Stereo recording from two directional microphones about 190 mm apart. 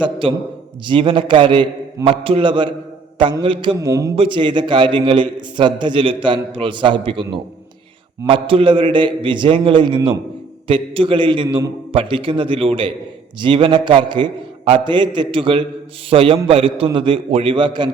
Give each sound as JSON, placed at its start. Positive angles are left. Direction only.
{"t": 0.0, "sound": "a man's voice", "side_deg": -30}
{"t": 4.1, "sound": "a man's voice", "side_deg": -25}
{"t": 8.3, "sound": "a man's voice", "side_deg": -25}